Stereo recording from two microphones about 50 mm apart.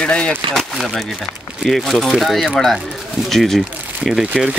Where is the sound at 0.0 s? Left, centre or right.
Left.